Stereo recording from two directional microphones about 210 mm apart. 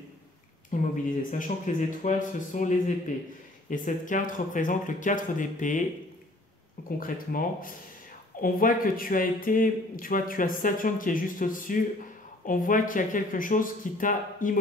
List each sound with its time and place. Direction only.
0.7 s speech: 40° left (ahead or behind)
3.7 s speech: 40° left (ahead or behind)
7.0 s speech: 40° left (ahead or behind)